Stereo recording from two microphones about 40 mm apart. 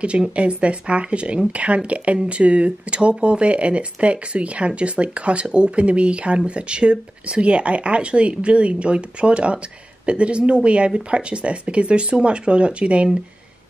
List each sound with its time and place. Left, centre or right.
0.4 s speech: right